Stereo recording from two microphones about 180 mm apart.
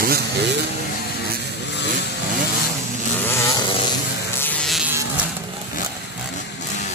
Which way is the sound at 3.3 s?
15° left (ahead or behind).